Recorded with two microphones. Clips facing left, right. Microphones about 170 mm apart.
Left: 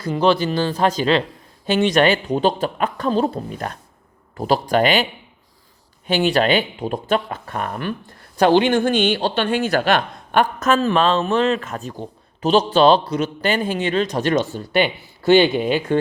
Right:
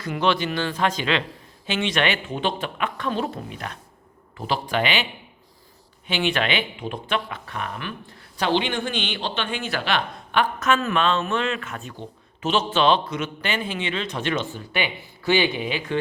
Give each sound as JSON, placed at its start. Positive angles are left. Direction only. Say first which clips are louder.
{"t": 0.0, "sound": "speech", "louder": "left 5 dB", "side_deg": 30}
{"t": 6.1, "sound": "speech", "louder": "left 7 dB", "side_deg": 40}